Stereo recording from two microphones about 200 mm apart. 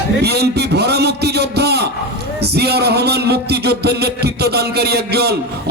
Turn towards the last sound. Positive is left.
turn(degrees=-55)  # may be behind; listen again after turning